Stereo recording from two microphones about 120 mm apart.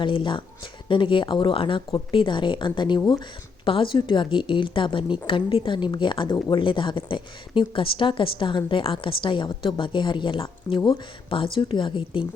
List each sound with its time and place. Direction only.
0.0 s speech: 45° left (ahead or behind)